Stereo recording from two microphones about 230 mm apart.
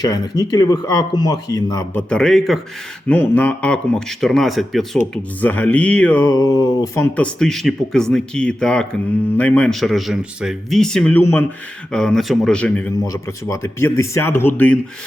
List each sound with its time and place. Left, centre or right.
0.0 s speech: centre